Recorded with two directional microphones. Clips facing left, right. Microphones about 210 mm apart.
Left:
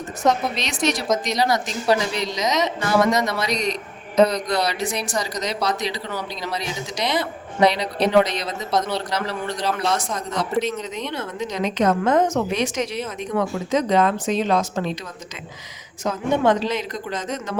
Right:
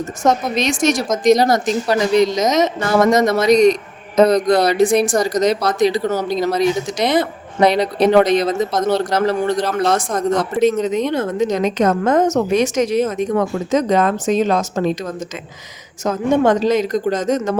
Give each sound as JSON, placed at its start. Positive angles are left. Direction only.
{"t": 0.2, "sound": "speech", "side_deg": -45}